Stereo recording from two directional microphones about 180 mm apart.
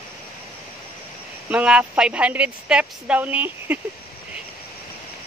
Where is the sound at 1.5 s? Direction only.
5° right (ahead or behind).